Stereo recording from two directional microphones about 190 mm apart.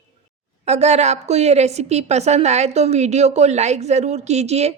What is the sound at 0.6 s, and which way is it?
Speech, 35° right (ahead or behind).